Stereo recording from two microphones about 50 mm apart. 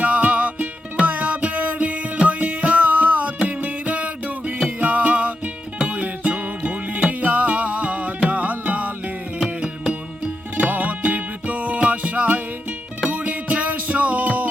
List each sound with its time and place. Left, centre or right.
0.0 s music: right
10.6 s music: right